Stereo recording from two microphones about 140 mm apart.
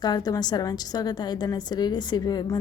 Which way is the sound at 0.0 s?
30° left (ahead or behind).